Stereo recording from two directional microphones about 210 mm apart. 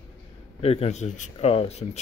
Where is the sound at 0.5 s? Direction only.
30° left (ahead or behind).